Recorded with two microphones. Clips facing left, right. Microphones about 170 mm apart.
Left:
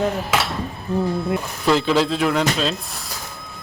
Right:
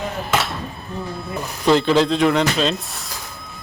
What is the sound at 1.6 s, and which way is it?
Speech, centre (ahead or behind).